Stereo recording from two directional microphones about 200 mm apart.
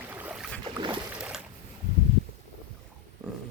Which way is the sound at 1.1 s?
5° right (ahead or behind).